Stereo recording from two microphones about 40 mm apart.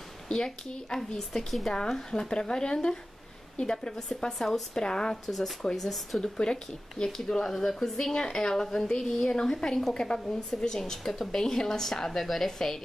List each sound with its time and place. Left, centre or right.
0.3 s speech: left
1.3 s speech: centre
1.7 s a woman's voice: centre
4.7 s a woman's voice: centre
5.2 s a woman's voice: centre
6.2 s a woman's voice: centre